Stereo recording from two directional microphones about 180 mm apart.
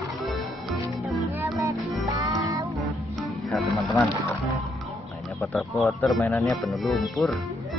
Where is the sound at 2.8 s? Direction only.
Centre (ahead or behind).